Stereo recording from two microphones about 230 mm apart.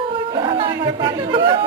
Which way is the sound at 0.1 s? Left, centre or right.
Right.